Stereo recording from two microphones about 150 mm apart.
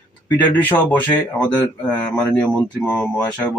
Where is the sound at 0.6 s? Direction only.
10° left (ahead or behind).